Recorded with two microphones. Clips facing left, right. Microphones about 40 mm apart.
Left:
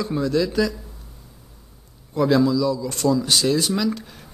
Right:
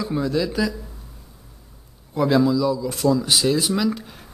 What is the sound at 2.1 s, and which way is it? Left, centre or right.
A man's voice, centre.